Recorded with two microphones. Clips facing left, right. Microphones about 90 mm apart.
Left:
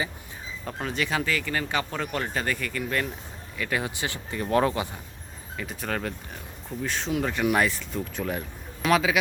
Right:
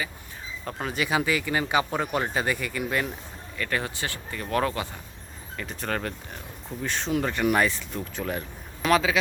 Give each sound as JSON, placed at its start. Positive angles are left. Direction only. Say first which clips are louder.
{"t": 0.6, "sound": "speech", "louder": "even", "side_deg": 0}
{"t": 3.6, "sound": "speech", "louder": "even", "side_deg": 10}
{"t": 5.5, "sound": "speech", "louder": "even", "side_deg": 5}